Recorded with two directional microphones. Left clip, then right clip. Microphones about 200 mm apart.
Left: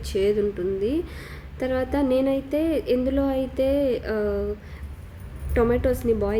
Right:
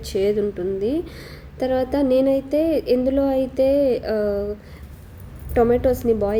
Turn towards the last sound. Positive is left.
turn(degrees=-10)  # may be behind; listen again after turning